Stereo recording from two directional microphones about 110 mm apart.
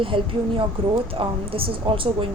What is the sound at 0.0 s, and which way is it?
A woman's voice, 55° right (ahead or behind).